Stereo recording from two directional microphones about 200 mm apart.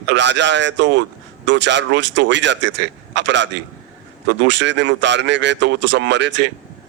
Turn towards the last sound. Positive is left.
turn(degrees=-60)  # may be behind; listen again after turning